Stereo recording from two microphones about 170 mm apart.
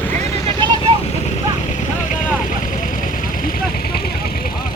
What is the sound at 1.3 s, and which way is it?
Vehicle, 45° left (ahead or behind).